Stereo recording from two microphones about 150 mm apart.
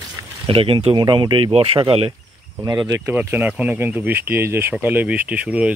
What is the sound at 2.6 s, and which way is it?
Speech, 25° right (ahead or behind).